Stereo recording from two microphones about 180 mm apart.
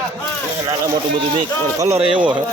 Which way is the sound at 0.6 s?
25° right (ahead or behind).